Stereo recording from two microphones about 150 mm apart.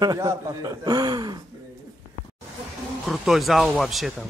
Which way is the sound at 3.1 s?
Centre (ahead or behind).